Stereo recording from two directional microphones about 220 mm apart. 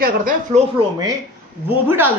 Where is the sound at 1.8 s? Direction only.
10° right (ahead or behind).